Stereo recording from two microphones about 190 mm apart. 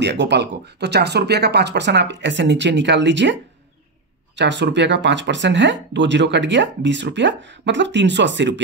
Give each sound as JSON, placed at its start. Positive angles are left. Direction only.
{"t": 0.0, "sound": "speech", "side_deg": -65}
{"t": 4.4, "sound": "speech", "side_deg": -70}